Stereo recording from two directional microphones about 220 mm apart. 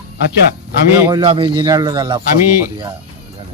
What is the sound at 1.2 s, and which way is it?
Speech, 25° right (ahead or behind).